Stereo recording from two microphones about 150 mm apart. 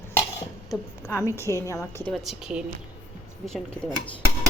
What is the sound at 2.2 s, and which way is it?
Speech, 5° right (ahead or behind).